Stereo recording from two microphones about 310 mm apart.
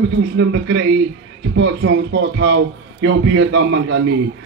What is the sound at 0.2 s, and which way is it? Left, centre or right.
Speech, right.